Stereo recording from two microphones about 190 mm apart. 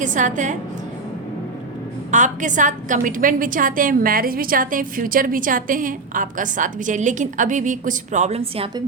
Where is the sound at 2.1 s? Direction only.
40° right (ahead or behind).